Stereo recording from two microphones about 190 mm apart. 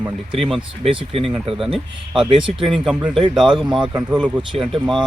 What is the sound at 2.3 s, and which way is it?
Speech, 25° right (ahead or behind).